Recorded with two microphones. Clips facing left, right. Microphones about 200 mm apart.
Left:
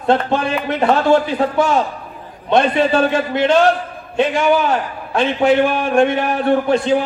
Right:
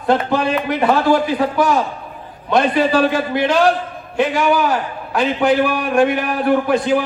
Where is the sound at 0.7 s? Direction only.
25° left (ahead or behind).